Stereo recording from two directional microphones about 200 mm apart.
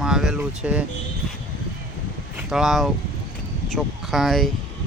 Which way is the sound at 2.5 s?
Centre (ahead or behind).